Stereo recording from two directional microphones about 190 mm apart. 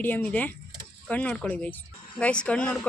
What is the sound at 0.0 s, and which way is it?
Speech, 10° left (ahead or behind).